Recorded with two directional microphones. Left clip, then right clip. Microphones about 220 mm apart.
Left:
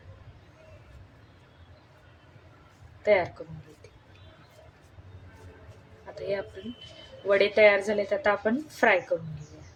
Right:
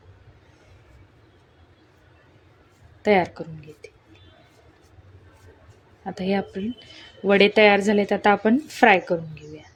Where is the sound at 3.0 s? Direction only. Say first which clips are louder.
Right 4 dB; 45° right (ahead or behind).